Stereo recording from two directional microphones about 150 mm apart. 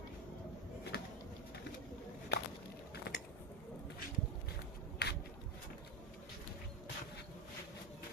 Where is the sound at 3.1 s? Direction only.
90° left.